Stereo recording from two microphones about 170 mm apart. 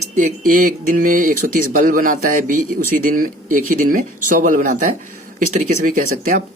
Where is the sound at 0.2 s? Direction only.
50° right (ahead or behind).